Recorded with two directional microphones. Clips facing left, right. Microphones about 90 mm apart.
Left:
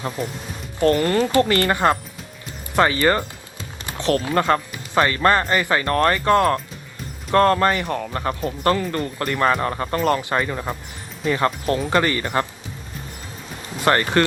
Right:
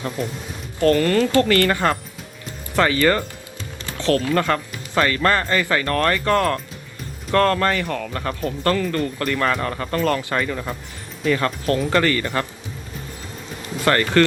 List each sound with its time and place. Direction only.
0.2 s speech: centre (ahead or behind)
0.8 s speech: 25° left (ahead or behind)
13.8 s speech: 25° left (ahead or behind)